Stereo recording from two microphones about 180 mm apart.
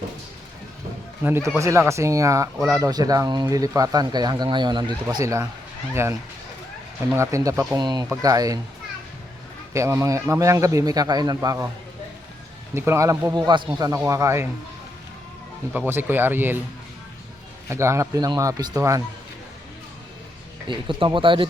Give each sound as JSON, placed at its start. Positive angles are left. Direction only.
{"t": 1.2, "sound": "speech", "side_deg": -15}
{"t": 7.2, "sound": "speech", "side_deg": -15}
{"t": 9.7, "sound": "speech", "side_deg": -15}
{"t": 12.7, "sound": "speech", "side_deg": -15}
{"t": 15.9, "sound": "speech", "side_deg": -10}
{"t": 17.7, "sound": "speech", "side_deg": -15}
{"t": 20.7, "sound": "speech", "side_deg": -25}